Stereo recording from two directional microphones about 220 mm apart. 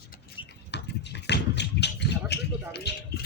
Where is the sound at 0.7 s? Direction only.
50° left (ahead or behind).